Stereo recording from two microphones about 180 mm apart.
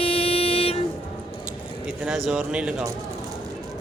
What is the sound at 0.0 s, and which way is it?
Vehicle, 30° left (ahead or behind).